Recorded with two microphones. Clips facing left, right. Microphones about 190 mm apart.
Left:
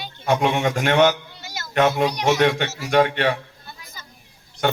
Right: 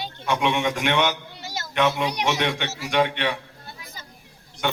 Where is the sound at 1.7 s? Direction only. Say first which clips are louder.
Left 4 dB; 45° left (ahead or behind).